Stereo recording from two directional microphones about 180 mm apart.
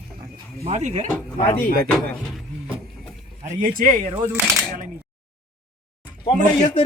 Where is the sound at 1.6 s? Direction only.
55° right (ahead or behind).